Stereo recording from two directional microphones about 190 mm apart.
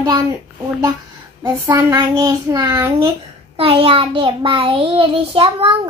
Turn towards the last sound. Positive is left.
turn(degrees=-30)  # may be behind; listen again after turning